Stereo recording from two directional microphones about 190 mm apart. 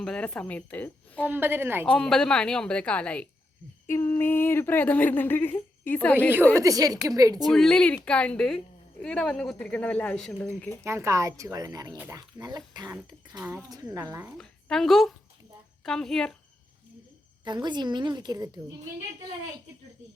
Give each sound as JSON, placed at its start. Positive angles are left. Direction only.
{"t": 0.0, "sound": "speech", "side_deg": 5}
{"t": 1.3, "sound": "a woman's voice", "side_deg": -10}
{"t": 1.8, "sound": "a woman's voice", "side_deg": 5}
{"t": 6.5, "sound": "a woman's voice", "side_deg": -15}
{"t": 7.4, "sound": "a woman's voice", "side_deg": 5}
{"t": 10.8, "sound": "a woman's voice", "side_deg": -15}
{"t": 14.3, "sound": "a woman's voice", "side_deg": 5}
{"t": 17.4, "sound": "speech", "side_deg": -25}